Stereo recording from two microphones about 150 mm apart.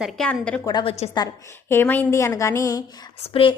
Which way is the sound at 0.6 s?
30° left (ahead or behind).